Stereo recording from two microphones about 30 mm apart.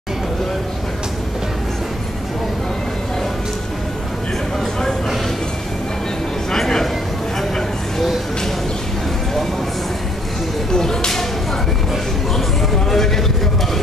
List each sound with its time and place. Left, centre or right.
10.7 s speech: left
12.9 s speech: centre